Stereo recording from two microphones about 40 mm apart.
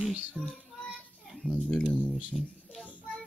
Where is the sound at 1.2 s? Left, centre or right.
Centre.